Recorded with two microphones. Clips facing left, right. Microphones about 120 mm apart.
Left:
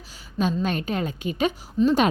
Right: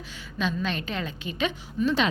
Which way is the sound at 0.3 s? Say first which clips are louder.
Left 4 dB; 45° left (ahead or behind).